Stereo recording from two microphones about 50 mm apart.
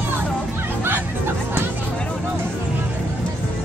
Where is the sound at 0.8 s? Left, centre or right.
Right.